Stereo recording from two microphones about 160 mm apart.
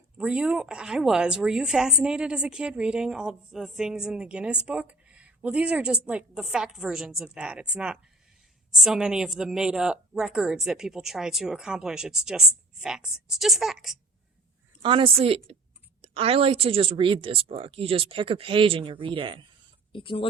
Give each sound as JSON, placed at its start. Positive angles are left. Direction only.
{"t": 0.2, "sound": "a woman's voice", "side_deg": -5}
{"t": 14.8, "sound": "speech", "side_deg": -35}
{"t": 19.9, "sound": "speech", "side_deg": 35}